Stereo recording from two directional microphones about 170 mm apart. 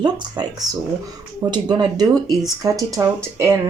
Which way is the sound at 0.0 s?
25° right (ahead or behind).